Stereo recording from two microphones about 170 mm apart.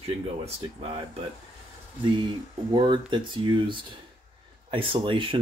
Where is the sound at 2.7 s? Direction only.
25° right (ahead or behind).